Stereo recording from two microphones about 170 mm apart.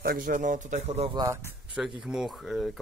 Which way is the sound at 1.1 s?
20° right (ahead or behind).